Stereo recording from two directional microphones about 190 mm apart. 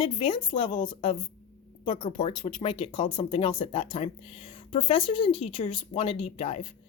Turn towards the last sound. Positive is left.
turn(degrees=30)  # may be behind; listen again after turning